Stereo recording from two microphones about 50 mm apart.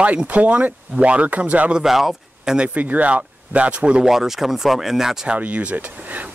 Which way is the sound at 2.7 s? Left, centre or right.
Right.